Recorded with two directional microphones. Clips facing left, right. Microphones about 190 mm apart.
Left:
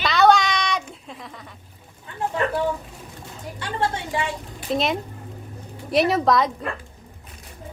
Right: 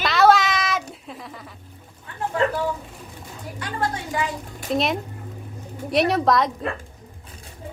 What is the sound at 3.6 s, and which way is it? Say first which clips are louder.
Speech: left 1 dB; 25° left (ahead or behind).